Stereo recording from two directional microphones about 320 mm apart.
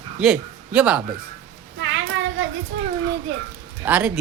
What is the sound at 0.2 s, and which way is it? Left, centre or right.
Speech, centre.